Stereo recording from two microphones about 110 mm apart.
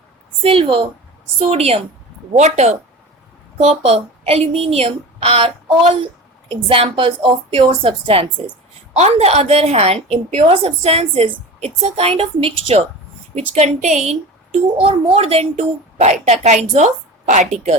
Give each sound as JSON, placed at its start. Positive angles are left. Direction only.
{"t": 0.4, "sound": "a woman's voice", "side_deg": -60}
{"t": 1.4, "sound": "a woman's voice", "side_deg": -65}
{"t": 2.3, "sound": "a woman's voice", "side_deg": -90}
{"t": 3.7, "sound": "a woman's voice", "side_deg": -65}
{"t": 6.5, "sound": "a woman's voice", "side_deg": -55}
{"t": 9.0, "sound": "a woman's voice", "side_deg": -80}
{"t": 13.3, "sound": "a woman's voice", "side_deg": -85}
{"t": 16.2, "sound": "a woman's voice", "side_deg": -90}